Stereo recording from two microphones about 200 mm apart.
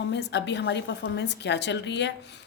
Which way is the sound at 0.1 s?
60° left (ahead or behind).